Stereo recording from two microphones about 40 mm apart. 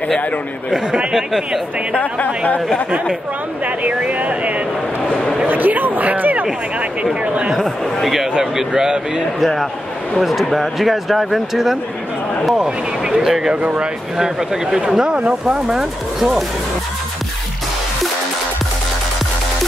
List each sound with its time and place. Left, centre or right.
0.7 s speech: centre
2.0 s a woman's voice: left
3.6 s speech: right
5.5 s speech: right
7.5 s speech: centre
8.3 s speech: centre
9.4 s speech: centre; by 15.8 s right
15.8 s speech: centre